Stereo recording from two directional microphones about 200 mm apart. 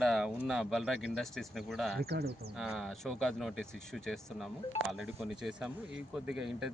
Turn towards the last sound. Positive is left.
turn(degrees=-5)  # may be behind; listen again after turning